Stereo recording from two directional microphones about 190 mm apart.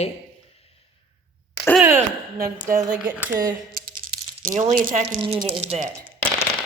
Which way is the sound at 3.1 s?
10° right (ahead or behind).